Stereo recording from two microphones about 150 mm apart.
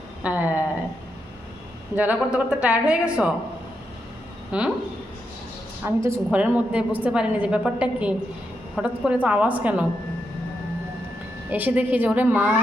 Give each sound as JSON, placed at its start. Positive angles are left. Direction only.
{"t": 0.2, "sound": "a woman's voice", "side_deg": -10}
{"t": 2.0, "sound": "a woman's voice", "side_deg": -10}
{"t": 4.5, "sound": "a woman's voice", "side_deg": -5}
{"t": 5.8, "sound": "a woman's voice", "side_deg": -15}
{"t": 11.5, "sound": "a woman's voice", "side_deg": -10}